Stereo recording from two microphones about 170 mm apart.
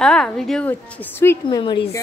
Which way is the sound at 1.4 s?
25° left (ahead or behind).